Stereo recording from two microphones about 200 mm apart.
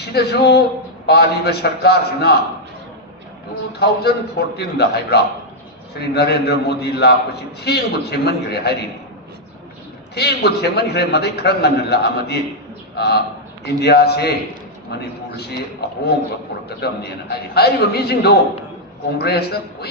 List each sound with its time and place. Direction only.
0.0 s a man's voice: 55° left (ahead or behind)
3.7 s a man's voice: 55° left (ahead or behind)
10.2 s a man's voice: 55° left (ahead or behind)
15.8 s a man's voice: 50° left (ahead or behind)